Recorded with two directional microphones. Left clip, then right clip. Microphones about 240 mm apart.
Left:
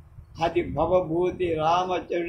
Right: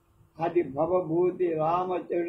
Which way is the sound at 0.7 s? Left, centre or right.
Left.